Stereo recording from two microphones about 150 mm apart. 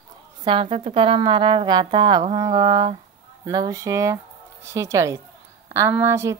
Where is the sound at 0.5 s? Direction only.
40° right (ahead or behind).